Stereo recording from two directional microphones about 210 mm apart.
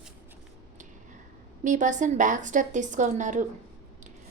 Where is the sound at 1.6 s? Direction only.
35° right (ahead or behind).